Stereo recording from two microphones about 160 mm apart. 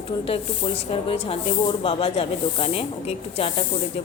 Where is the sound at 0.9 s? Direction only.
35° left (ahead or behind).